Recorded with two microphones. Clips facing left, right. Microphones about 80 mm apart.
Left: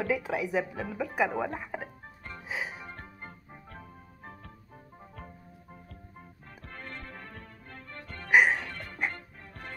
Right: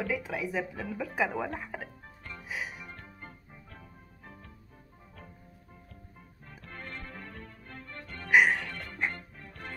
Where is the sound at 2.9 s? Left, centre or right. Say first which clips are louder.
Left 2 dB; left.